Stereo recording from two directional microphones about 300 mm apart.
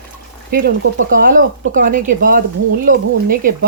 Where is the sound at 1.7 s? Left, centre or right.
Right.